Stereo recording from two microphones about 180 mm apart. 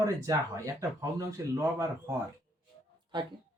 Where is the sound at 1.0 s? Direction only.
15° right (ahead or behind).